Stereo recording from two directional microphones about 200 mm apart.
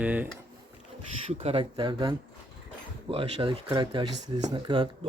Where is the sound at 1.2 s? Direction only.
30° right (ahead or behind).